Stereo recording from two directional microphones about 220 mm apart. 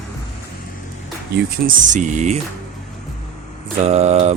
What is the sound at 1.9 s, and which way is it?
Speech, 35° right (ahead or behind).